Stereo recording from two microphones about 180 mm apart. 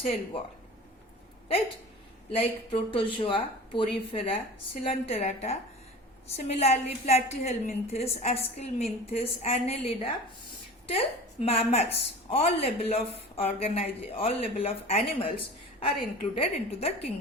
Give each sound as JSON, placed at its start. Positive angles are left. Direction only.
{"t": 2.3, "sound": "a woman's voice", "side_deg": 30}